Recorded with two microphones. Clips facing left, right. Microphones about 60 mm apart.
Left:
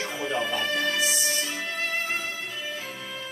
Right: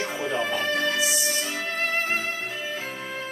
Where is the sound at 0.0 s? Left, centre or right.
Right.